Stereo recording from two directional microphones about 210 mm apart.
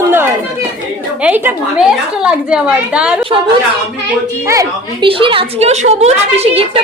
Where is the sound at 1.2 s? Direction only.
5° right (ahead or behind).